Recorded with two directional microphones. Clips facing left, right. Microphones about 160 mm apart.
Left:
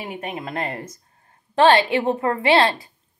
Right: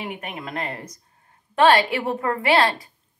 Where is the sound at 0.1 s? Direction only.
30° left (ahead or behind).